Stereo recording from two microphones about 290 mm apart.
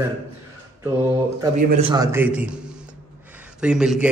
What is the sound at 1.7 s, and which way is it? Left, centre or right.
Speech, centre.